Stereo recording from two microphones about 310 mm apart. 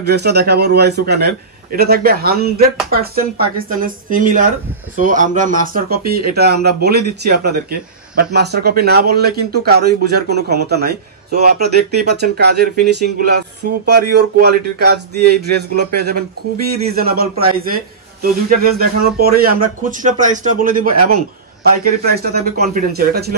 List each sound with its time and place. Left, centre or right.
0.0 s speech: right
13.8 s speech: right
22.1 s speech: right